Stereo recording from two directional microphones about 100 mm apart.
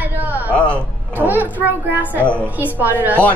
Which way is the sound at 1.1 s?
20° right (ahead or behind).